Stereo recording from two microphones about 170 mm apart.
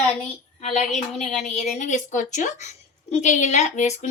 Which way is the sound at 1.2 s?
45° left (ahead or behind).